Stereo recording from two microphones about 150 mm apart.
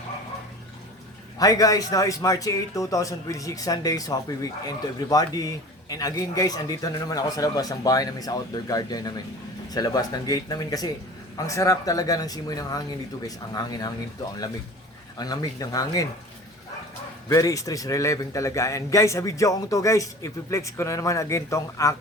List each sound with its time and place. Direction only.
1.4 s a man's voice: 25° left (ahead or behind)
15.2 s a man's voice: 25° left (ahead or behind)
17.2 s a man's voice: 20° left (ahead or behind)